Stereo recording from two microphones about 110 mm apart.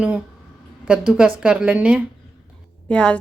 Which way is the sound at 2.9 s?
10° left (ahead or behind).